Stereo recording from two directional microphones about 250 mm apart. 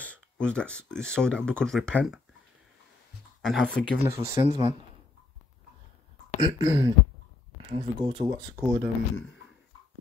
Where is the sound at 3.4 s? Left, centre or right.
Centre.